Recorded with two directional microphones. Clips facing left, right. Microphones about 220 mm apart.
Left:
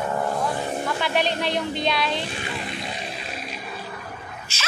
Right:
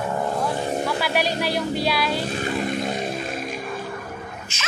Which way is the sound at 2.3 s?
45° right (ahead or behind).